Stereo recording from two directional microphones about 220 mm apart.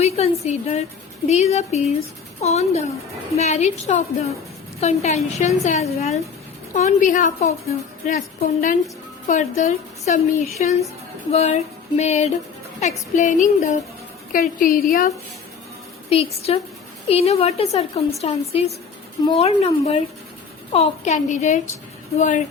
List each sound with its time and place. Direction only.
0.0 s a woman's voice: 30° left (ahead or behind)
16.0 s a woman's voice: 25° left (ahead or behind)